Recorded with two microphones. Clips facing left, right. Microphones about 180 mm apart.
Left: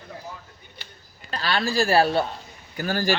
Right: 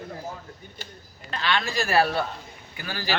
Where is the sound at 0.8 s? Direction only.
45° right (ahead or behind).